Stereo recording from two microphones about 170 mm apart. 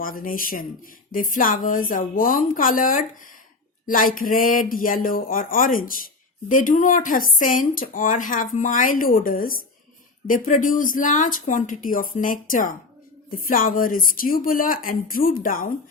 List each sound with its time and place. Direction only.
0.0 s a woman's voice: 55° left (ahead or behind)